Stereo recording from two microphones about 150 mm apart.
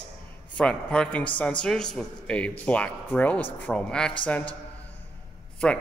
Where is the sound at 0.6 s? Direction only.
5° left (ahead or behind).